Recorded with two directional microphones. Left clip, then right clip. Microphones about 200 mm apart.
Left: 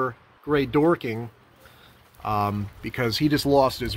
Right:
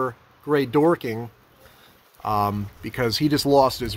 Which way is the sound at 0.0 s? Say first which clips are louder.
Right 1 dB; 10° right (ahead or behind).